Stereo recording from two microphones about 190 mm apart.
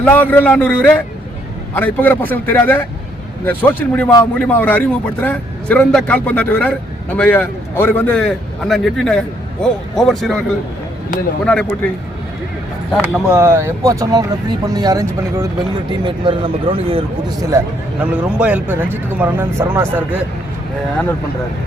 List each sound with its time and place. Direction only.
0.0 s a man's voice: 10° left (ahead or behind)
11.4 s a man's voice: 5° left (ahead or behind)
13.0 s speech: 10° right (ahead or behind); by 17.3 s 30° right (ahead or behind)
17.5 s speech: 15° right (ahead or behind)